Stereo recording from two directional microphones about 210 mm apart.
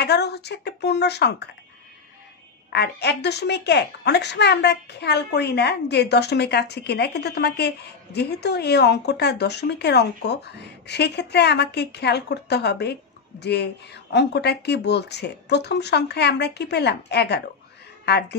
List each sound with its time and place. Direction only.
0.0 s a woman's voice: 50° left (ahead or behind)
2.7 s a woman's voice: 55° left (ahead or behind)